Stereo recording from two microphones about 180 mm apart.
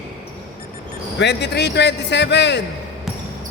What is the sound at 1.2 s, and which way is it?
A man's voice, 70° left (ahead or behind).